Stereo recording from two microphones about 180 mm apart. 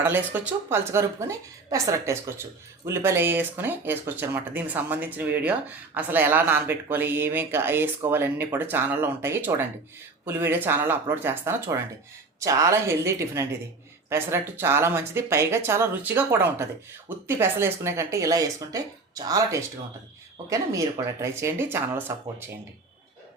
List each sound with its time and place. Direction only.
0.0 s speech: 10° right (ahead or behind)